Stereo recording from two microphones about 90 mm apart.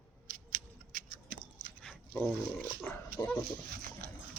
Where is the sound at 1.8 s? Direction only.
10° left (ahead or behind).